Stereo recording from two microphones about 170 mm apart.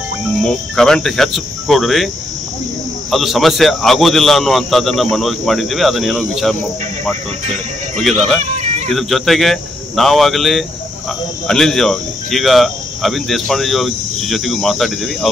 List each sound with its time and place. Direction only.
0.4 s speech: 5° left (ahead or behind)
3.1 s speech: centre (ahead or behind)
8.0 s speech: centre (ahead or behind)
8.5 s music: 40° right (ahead or behind)
8.8 s speech: centre (ahead or behind)